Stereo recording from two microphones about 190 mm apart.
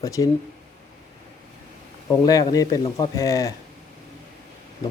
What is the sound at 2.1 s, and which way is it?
Speech, 20° left (ahead or behind).